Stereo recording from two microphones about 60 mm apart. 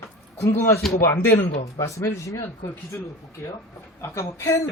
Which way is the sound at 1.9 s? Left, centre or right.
Left.